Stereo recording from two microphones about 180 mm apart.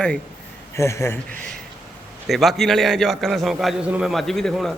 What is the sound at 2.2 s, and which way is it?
A man's voice, centre (ahead or behind).